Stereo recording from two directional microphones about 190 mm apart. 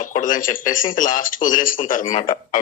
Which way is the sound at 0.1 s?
45° left (ahead or behind).